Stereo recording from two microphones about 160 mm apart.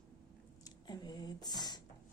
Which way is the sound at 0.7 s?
25° left (ahead or behind).